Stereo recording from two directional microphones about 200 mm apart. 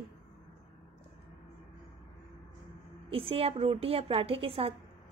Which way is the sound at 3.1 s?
30° right (ahead or behind).